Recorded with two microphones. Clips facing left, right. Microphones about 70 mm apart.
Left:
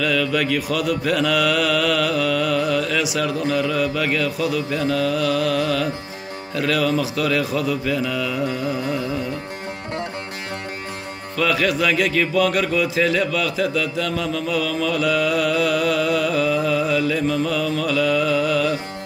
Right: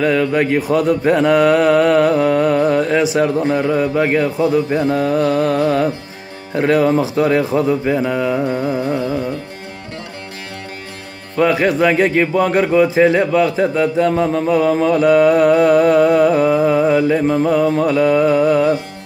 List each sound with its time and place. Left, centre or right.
0.0 s speech: right
11.3 s speech: right